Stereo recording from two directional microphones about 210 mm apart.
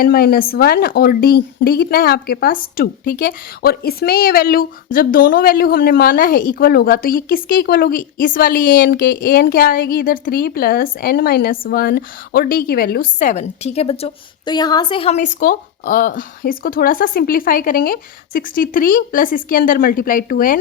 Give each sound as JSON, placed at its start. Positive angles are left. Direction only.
{"t": 0.0, "sound": "a woman's voice", "side_deg": 45}